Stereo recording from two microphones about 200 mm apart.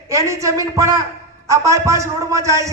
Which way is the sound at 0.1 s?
15° right (ahead or behind).